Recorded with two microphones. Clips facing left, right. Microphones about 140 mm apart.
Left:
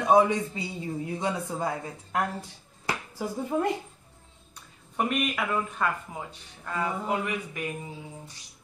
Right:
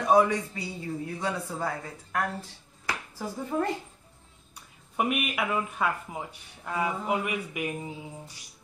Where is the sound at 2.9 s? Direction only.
15° left (ahead or behind).